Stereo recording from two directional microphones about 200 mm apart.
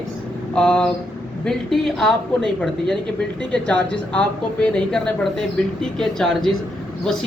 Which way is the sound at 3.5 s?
5° left (ahead or behind).